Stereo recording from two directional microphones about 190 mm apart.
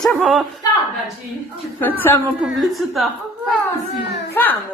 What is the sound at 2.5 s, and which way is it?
Speech, centre (ahead or behind).